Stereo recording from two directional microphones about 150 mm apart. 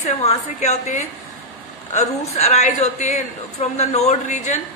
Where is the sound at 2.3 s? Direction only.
45° left (ahead or behind).